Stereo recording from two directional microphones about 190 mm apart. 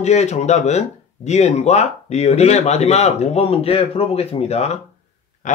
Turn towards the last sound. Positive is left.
turn(degrees=40)  # may be behind; listen again after turning